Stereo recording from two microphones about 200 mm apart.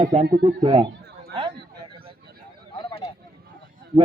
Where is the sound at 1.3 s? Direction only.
25° right (ahead or behind).